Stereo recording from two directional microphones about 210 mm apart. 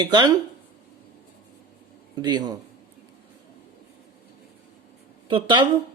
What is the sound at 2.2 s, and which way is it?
Speech, 20° right (ahead or behind).